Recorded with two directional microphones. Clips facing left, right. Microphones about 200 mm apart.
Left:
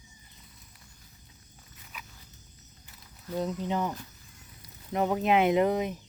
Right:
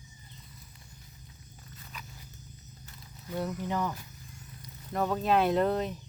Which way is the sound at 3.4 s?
20° left (ahead or behind).